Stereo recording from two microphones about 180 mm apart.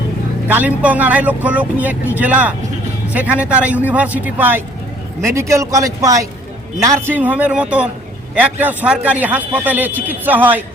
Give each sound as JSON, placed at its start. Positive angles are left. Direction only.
{"t": 0.4, "sound": "a man's voice", "side_deg": -10}